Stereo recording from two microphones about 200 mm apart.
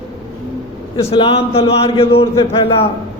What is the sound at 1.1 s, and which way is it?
A man's voice, 30° left (ahead or behind).